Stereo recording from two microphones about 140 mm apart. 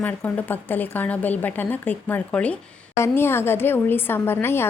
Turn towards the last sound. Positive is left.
turn(degrees=15)  # may be behind; listen again after turning